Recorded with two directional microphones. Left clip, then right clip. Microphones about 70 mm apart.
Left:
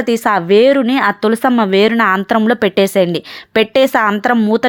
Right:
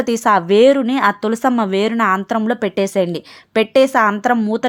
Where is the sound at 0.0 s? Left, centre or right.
Centre; by 2.5 s left.